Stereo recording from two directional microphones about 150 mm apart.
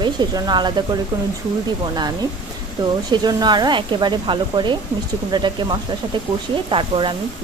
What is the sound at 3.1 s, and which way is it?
A woman's voice, 30° right (ahead or behind).